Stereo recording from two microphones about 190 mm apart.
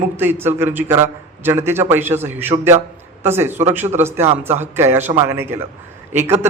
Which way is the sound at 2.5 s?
25° right (ahead or behind).